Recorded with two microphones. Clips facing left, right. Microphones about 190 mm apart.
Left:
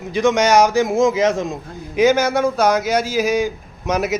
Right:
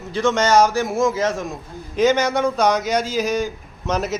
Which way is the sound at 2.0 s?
10° left (ahead or behind).